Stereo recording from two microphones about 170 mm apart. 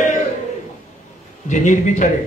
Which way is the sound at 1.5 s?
45° left (ahead or behind).